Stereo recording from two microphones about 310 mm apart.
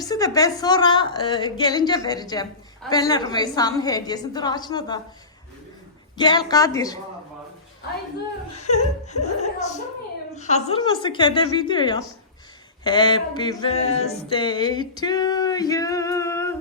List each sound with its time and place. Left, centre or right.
0.0 s speech: centre
6.1 s speech: centre
8.5 s laughter: left
9.2 s a child's voice: left